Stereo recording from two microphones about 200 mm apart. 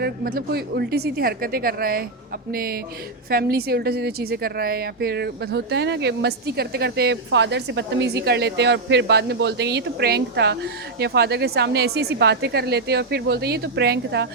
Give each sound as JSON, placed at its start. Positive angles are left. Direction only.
{"t": 0.0, "sound": "a woman's voice", "side_deg": -50}